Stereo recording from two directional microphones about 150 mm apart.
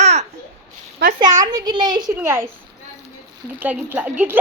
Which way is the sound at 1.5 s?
25° right (ahead or behind).